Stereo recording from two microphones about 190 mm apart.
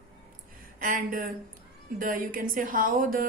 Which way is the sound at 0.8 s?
45° right (ahead or behind).